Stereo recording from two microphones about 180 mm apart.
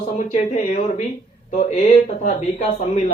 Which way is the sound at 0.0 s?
40° left (ahead or behind).